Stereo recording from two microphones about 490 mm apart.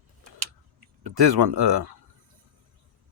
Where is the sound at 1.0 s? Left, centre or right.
Right.